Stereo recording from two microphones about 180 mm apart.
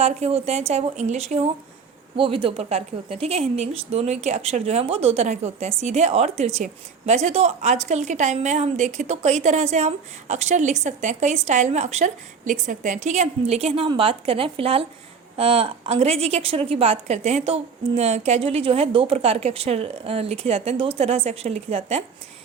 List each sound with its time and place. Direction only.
0.0 s speech: 35° right (ahead or behind)